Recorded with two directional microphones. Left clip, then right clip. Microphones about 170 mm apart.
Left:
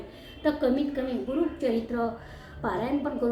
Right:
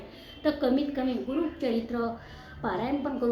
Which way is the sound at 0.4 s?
20° right (ahead or behind).